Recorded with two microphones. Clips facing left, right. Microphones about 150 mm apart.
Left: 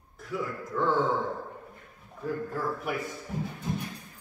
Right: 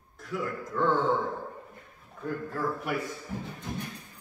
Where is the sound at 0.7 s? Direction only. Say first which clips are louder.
Right 1 dB; centre (ahead or behind).